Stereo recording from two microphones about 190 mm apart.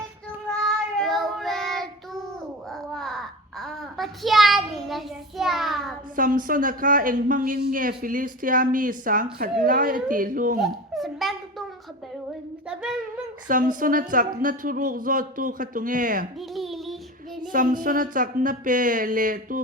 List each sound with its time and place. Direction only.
0.4 s child singing: centre (ahead or behind)
2.6 s babbling: centre (ahead or behind)
6.1 s speech: 45° right (ahead or behind)
10.6 s a sound: centre (ahead or behind)
12.6 s humming: 5° right (ahead or behind)
13.5 s speech: 45° right (ahead or behind)
16.4 s a sound: centre (ahead or behind)
17.5 s speech: 45° right (ahead or behind)